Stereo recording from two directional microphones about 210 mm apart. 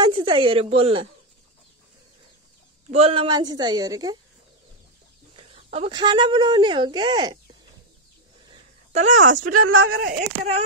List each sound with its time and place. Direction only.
0.0 s speech: 25° right (ahead or behind)
2.9 s a woman's voice: 25° right (ahead or behind)
5.3 s speech: 25° right (ahead or behind)
8.5 s a sound: 35° right (ahead or behind)
9.4 s speech: 90° right; by 10.0 s 70° right (ahead or behind)
10.0 s speech: 30° right (ahead or behind)